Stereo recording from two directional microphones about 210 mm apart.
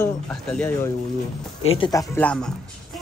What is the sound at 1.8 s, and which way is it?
Speech, 15° left (ahead or behind).